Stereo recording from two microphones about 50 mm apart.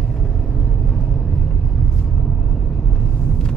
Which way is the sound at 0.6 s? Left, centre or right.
Centre.